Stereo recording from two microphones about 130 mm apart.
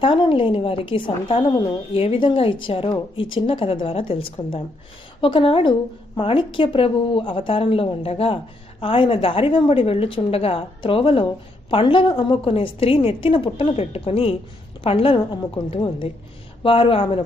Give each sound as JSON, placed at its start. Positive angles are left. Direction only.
{"t": 0.0, "sound": "a woman's voice", "side_deg": 45}